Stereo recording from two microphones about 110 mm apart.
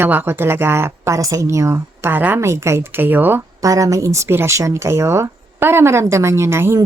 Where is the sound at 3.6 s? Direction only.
30° right (ahead or behind).